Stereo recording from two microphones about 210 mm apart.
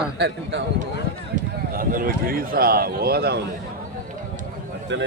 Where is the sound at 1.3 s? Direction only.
40° right (ahead or behind).